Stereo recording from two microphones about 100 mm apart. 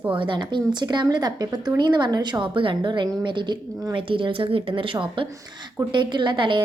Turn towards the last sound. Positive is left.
turn(degrees=-55)  # may be behind; listen again after turning